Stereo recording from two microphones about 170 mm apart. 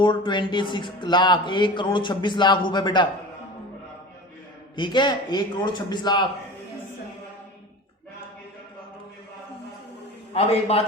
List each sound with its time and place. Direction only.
0.0 s a man's voice: 25° left (ahead or behind)
4.8 s a man's voice: 25° left (ahead or behind)
10.3 s a man's voice: 35° left (ahead or behind)